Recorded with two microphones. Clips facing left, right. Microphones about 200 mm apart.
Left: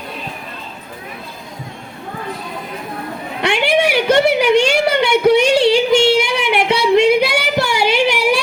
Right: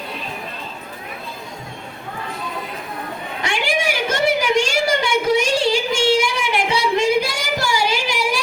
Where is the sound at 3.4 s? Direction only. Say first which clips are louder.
Left 7 dB; 65° left (ahead or behind).